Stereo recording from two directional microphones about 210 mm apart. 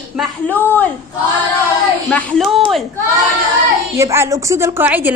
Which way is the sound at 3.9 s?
15° right (ahead or behind).